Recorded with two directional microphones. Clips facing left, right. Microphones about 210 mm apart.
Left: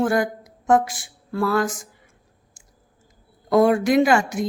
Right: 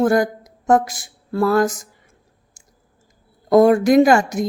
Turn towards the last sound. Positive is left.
turn(degrees=-40)  # may be behind; listen again after turning